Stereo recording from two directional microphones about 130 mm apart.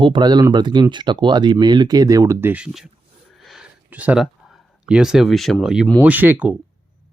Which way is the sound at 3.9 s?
10° right (ahead or behind).